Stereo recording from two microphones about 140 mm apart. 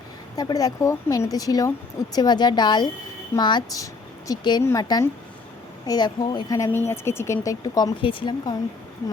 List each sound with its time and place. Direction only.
0.3 s a woman's voice: 25° left (ahead or behind)
6.7 s a woman's voice: 15° left (ahead or behind); by 8.5 s 35° left (ahead or behind)